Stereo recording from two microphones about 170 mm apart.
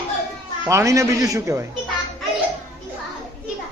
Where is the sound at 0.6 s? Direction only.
15° right (ahead or behind).